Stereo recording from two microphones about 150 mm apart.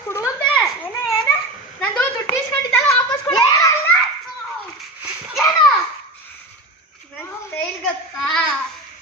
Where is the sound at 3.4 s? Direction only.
30° left (ahead or behind).